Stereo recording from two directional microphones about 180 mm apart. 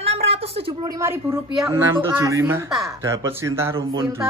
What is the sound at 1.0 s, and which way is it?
Speech, 15° right (ahead or behind).